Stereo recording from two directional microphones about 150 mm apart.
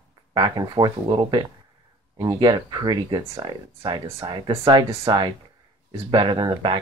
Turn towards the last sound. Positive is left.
turn(degrees=-30)  # may be behind; listen again after turning